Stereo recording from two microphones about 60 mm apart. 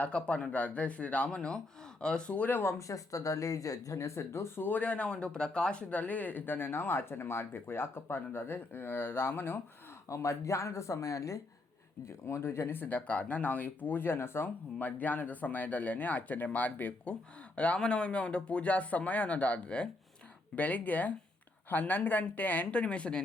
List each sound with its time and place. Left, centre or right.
0.0 s speech: centre
2.6 s speech: left
4.6 s speech: left
10.1 s speech: left
12.0 s speech: left
14.8 s speech: left